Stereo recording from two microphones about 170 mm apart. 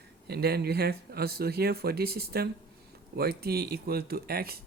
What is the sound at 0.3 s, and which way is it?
Speech, 70° right (ahead or behind).